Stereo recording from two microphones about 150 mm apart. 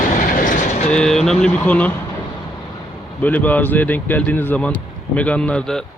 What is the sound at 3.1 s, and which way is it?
Speech, 10° left (ahead or behind).